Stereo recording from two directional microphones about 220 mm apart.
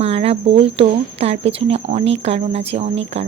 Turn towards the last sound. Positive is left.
turn(degrees=-30)  # may be behind; listen again after turning